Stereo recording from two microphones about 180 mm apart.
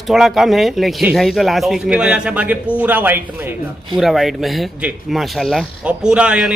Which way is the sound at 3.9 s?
Centre (ahead or behind).